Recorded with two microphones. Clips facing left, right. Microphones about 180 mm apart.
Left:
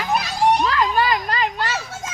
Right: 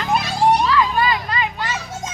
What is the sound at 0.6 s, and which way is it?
Speech, 45° left (ahead or behind).